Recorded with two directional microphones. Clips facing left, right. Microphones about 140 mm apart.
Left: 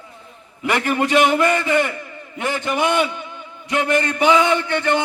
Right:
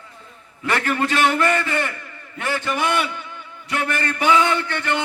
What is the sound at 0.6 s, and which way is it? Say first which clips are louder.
A man's voice: left 2 dB; 15° left (ahead or behind).